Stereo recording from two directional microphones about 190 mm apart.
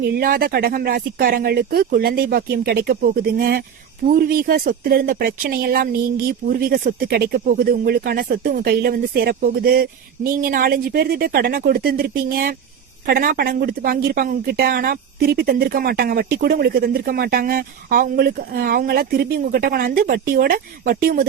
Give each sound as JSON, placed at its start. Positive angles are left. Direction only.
{"t": 0.0, "sound": "speech", "side_deg": -50}